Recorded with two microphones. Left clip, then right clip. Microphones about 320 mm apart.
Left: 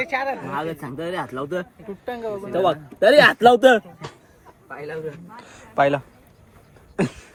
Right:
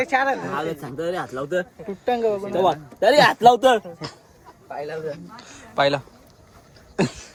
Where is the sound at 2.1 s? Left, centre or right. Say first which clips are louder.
Right 8 dB; right.